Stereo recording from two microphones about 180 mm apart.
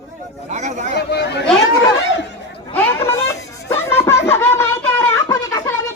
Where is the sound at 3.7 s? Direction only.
15° left (ahead or behind).